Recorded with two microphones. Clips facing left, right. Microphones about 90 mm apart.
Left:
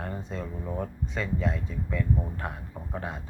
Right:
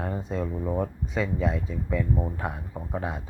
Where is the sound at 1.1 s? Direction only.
5° right (ahead or behind).